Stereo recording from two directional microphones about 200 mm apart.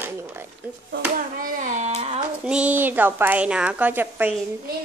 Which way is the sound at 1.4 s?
40° right (ahead or behind).